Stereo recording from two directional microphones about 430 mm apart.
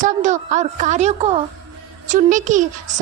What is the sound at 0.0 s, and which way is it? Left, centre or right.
A woman's voice, centre.